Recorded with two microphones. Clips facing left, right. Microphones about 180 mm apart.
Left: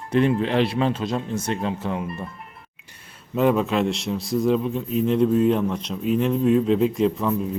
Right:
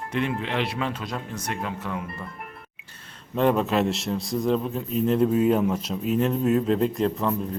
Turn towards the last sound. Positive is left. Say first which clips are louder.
# left 3 dB
turn(degrees=0)  # may be behind; listen again after turning